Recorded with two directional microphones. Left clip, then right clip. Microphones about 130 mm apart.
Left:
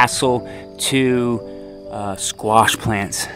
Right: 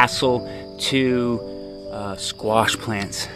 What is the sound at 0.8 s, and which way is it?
Speech, 45° left (ahead or behind).